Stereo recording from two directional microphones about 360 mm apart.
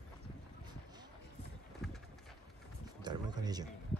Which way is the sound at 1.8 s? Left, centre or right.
Centre.